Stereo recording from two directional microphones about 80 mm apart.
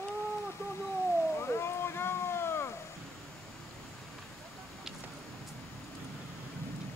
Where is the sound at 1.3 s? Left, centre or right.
Left.